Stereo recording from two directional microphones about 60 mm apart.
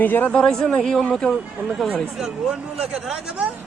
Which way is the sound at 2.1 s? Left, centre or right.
Centre.